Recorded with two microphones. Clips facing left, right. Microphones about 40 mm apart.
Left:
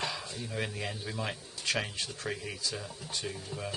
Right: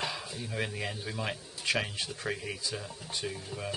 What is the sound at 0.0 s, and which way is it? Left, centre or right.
Speech, centre.